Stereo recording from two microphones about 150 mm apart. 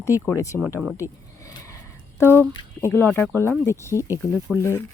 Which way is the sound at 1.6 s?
20° left (ahead or behind).